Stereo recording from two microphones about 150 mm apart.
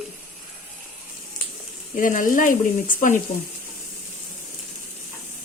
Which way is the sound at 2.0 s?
60° left (ahead or behind).